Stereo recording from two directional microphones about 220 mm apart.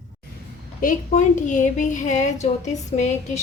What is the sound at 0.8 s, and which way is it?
A woman's voice, 35° left (ahead or behind).